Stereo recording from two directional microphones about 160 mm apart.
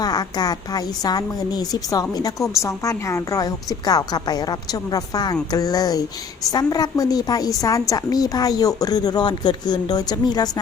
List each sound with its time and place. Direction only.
0.0 s a woman's voice: 25° left (ahead or behind)